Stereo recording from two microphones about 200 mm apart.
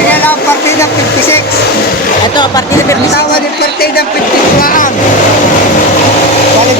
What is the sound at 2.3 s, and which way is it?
Speech, 20° left (ahead or behind).